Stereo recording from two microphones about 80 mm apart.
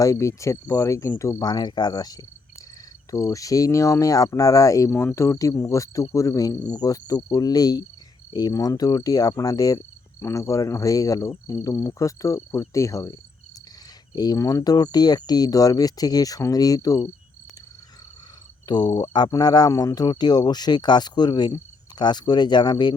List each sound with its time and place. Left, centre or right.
0.0 s speech: left
1.5 s speech: left
4.9 s speech: left
8.5 s speech: left
10.2 s speech: left
14.3 s speech: left
18.7 s speech: left